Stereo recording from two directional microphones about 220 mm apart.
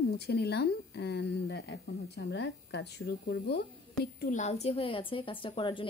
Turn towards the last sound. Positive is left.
turn(degrees=20)  # may be behind; listen again after turning